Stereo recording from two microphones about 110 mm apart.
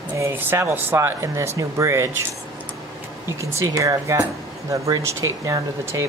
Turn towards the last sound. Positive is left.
turn(degrees=-30)  # may be behind; listen again after turning